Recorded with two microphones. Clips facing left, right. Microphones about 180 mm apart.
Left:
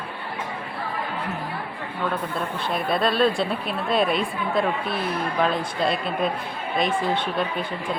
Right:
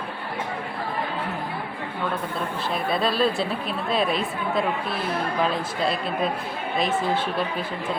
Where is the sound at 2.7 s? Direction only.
Centre (ahead or behind).